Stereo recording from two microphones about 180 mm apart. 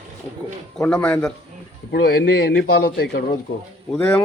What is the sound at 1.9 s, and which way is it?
A man's voice, 65° left (ahead or behind).